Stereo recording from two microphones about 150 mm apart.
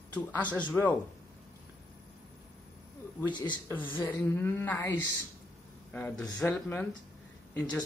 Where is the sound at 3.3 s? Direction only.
30° left (ahead or behind).